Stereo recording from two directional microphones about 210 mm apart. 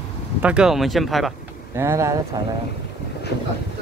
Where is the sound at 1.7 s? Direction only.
15° right (ahead or behind).